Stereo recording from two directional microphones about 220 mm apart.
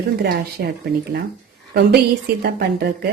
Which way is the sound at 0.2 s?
45° right (ahead or behind).